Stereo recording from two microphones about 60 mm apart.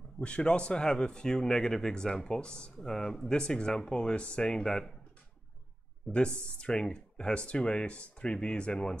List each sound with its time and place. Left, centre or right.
0.2 s speech: centre
6.0 s speech: centre